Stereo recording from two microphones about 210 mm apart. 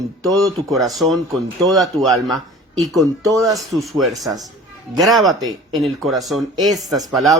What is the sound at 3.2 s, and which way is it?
Speech, 15° right (ahead or behind).